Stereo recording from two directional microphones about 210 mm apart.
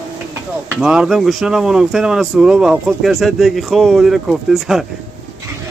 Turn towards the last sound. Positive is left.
turn(degrees=0)  # may be behind; listen again after turning